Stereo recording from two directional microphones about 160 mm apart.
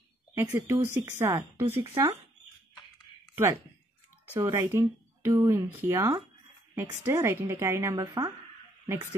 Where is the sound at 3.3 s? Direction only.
20° right (ahead or behind).